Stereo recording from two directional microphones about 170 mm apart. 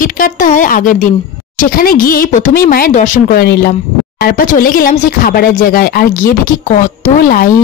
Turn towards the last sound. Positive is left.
turn(degrees=55)  # may be behind; listen again after turning